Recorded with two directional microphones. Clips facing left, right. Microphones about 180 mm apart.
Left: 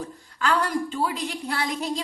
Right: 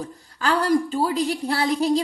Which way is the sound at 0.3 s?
35° right (ahead or behind).